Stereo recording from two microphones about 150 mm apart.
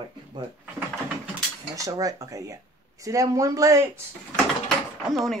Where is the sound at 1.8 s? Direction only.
25° right (ahead or behind).